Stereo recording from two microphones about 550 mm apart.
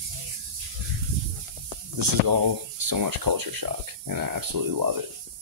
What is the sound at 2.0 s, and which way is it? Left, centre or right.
Speech, right.